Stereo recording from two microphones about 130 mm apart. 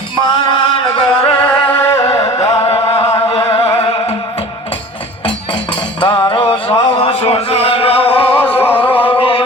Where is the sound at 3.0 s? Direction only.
25° left (ahead or behind).